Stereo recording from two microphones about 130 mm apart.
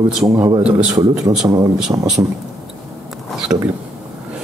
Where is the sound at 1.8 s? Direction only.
5° right (ahead or behind).